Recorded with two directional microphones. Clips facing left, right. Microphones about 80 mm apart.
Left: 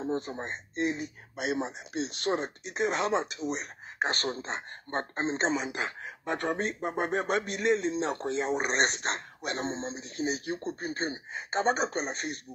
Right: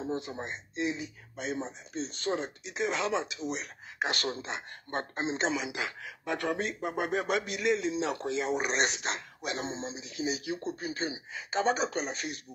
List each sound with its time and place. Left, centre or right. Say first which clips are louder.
0.0 s speech: left 2 dB; left